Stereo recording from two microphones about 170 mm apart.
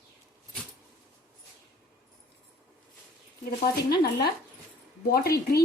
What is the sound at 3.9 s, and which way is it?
A woman's voice, 65° left (ahead or behind).